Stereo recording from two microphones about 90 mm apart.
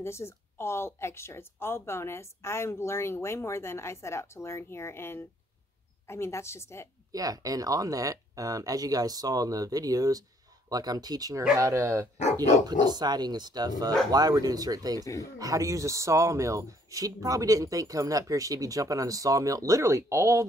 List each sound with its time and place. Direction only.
0.0 s a woman's voice: 30° left (ahead or behind)
7.1 s speech: 45° right (ahead or behind)
12.6 s speech: 50° right (ahead or behind); by 20.4 s 35° right (ahead or behind)